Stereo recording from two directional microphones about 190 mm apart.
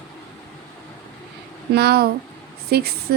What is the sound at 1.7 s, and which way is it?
Speech, 55° right (ahead or behind).